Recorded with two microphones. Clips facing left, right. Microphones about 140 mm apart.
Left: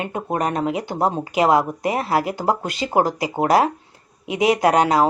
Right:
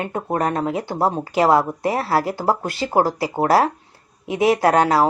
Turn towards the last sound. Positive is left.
turn(degrees=15)  # may be behind; listen again after turning